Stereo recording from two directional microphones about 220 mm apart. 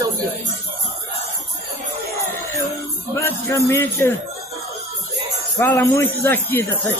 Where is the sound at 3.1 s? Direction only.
10° left (ahead or behind).